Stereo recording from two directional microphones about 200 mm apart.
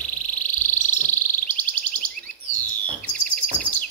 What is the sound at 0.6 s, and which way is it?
Frog, 10° left (ahead or behind).